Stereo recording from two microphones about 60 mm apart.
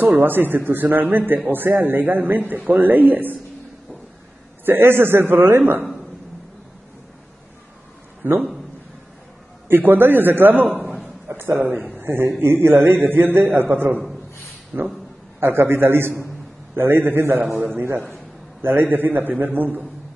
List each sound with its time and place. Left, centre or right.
0.0 s a man's voice: right
4.6 s a man's voice: right
8.2 s a man's voice: right
9.7 s a man's voice: right
11.7 s a man's voice: right